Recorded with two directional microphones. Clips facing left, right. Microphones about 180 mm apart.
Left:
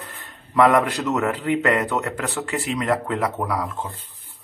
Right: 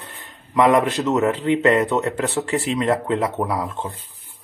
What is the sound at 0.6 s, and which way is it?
Speech, 20° right (ahead or behind).